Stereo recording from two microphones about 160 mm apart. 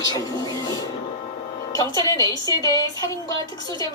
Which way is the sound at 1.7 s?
20° left (ahead or behind).